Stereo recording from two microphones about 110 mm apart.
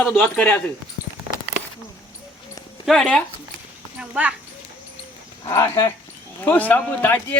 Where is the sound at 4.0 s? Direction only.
10° right (ahead or behind).